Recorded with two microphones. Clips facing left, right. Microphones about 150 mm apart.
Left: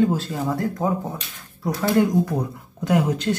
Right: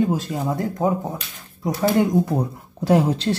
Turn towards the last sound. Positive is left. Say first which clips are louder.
# right 3 dB
turn(degrees=-30)  # may be behind; listen again after turning